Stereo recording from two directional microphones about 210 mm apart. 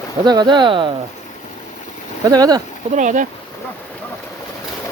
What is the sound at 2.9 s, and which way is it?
Speech, 35° right (ahead or behind).